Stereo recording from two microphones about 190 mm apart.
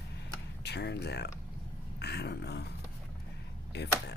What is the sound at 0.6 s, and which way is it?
Speech, 60° left (ahead or behind).